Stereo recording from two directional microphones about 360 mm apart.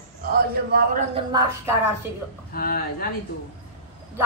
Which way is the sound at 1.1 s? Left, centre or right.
Centre.